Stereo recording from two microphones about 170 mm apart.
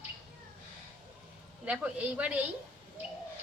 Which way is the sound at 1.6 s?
5° right (ahead or behind).